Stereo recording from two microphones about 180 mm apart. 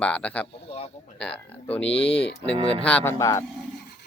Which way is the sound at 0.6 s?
35° left (ahead or behind).